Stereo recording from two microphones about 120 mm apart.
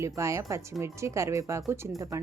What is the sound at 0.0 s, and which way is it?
Speech, 25° right (ahead or behind).